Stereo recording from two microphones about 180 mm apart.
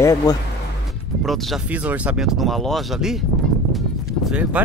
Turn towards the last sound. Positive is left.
turn(degrees=-5)  # may be behind; listen again after turning